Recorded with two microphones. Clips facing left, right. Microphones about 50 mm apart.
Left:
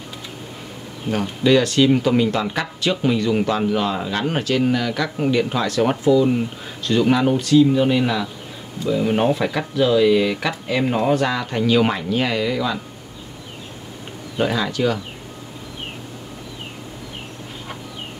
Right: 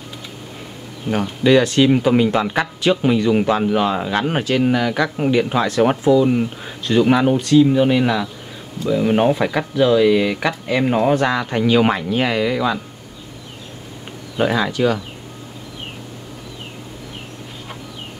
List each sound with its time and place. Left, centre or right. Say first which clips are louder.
1.1 s a man's voice: right 2 dB; centre
14.3 s a man's voice: right 3 dB; centre